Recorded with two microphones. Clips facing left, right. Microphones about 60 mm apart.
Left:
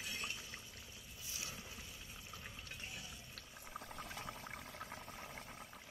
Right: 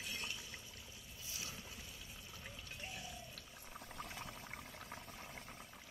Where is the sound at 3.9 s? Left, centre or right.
Centre.